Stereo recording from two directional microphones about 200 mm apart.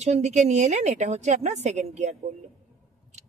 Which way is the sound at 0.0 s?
35° right (ahead or behind).